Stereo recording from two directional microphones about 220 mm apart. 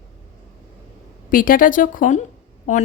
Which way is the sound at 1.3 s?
40° left (ahead or behind).